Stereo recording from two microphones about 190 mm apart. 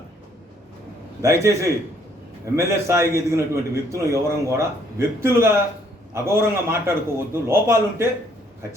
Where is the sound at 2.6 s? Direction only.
15° right (ahead or behind).